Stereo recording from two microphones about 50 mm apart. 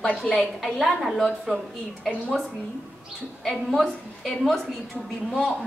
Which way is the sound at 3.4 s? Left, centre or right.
Centre.